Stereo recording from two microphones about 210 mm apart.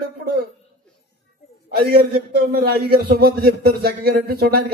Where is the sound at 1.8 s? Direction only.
45° right (ahead or behind).